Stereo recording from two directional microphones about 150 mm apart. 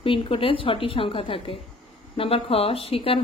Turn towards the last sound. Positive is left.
turn(degrees=40)  # may be behind; listen again after turning